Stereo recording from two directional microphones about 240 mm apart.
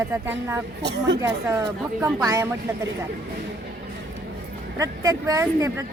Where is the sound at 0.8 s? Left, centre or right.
Right.